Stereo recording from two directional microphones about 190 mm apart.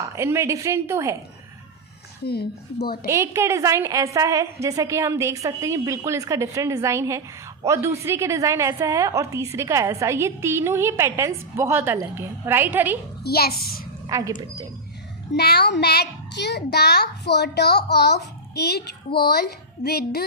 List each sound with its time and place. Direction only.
0.0 s a woman's voice: 15° right (ahead or behind)
2.2 s a child's voice: 55° left (ahead or behind)
3.1 s a woman's voice: 15° right (ahead or behind)
13.2 s a child's voice: 55° left (ahead or behind)
14.1 s a woman's voice: 15° right (ahead or behind)
15.3 s a child's voice: 60° left (ahead or behind)